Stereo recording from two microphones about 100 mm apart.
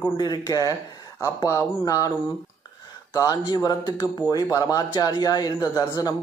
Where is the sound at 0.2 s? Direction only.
40° left (ahead or behind).